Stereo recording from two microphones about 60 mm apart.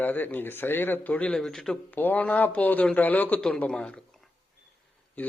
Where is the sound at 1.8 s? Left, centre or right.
Left.